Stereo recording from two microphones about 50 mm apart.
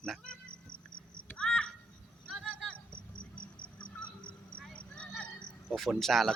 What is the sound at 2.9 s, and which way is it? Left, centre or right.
Cricket, left.